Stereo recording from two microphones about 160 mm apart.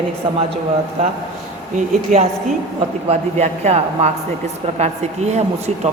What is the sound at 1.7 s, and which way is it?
A woman's voice, 50° right (ahead or behind).